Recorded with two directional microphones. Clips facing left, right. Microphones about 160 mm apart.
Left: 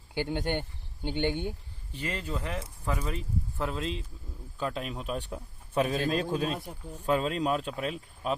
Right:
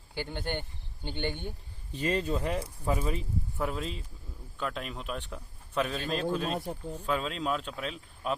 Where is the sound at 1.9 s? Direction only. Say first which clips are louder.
Right 5 dB; 20° right (ahead or behind).